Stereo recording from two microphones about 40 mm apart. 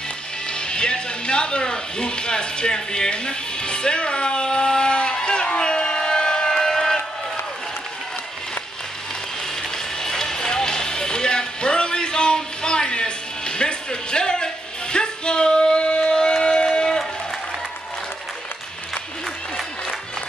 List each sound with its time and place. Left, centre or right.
0.5 s speech: left
6.5 s music: centre
9.6 s music: centre
16.4 s a sound: left